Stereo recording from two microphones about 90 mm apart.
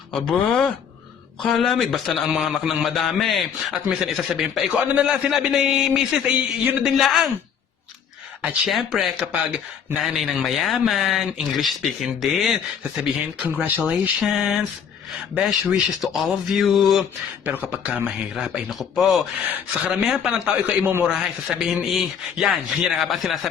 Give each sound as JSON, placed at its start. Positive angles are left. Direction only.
{"t": 0.1, "sound": "speech", "side_deg": 5}
{"t": 8.4, "sound": "speech", "side_deg": -10}
{"t": 13.0, "sound": "speech", "side_deg": -15}
{"t": 16.0, "sound": "speech", "side_deg": 0}
{"t": 17.7, "sound": "speech", "side_deg": -15}
{"t": 18.3, "sound": "speech", "side_deg": 0}
{"t": 19.0, "sound": "speech", "side_deg": -15}
{"t": 20.8, "sound": "a man's voice", "side_deg": -20}
{"t": 21.2, "sound": "speech", "side_deg": 0}